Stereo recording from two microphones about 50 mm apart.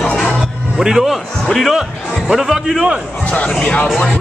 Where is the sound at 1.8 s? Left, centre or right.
Centre.